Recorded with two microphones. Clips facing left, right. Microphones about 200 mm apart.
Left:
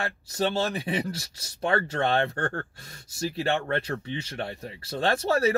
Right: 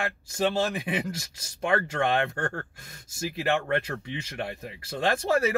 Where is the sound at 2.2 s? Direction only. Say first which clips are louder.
Left 1 dB; 35° left (ahead or behind).